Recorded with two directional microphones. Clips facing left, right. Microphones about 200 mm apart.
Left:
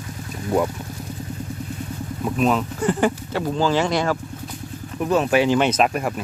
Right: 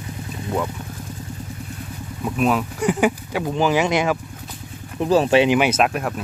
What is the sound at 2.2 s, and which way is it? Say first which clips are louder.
Speech: even; 5° right (ahead or behind).